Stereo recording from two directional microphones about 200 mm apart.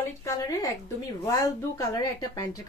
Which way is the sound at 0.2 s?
15° left (ahead or behind).